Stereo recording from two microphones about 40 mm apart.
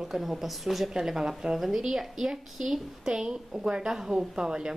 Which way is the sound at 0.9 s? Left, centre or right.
Centre.